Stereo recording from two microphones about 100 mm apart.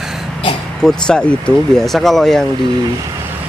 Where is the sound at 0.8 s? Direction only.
5° left (ahead or behind).